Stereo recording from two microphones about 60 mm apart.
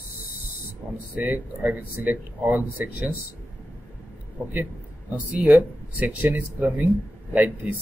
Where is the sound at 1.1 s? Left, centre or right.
Right.